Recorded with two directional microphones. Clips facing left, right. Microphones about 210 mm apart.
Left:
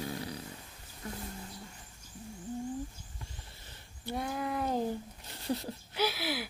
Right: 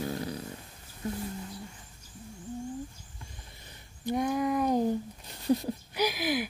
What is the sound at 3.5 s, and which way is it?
Speech, 15° right (ahead or behind).